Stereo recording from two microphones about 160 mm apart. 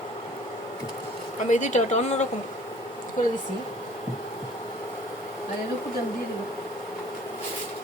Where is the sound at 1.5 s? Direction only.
50° left (ahead or behind).